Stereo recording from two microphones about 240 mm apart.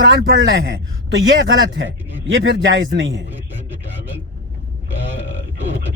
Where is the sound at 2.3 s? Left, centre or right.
Right.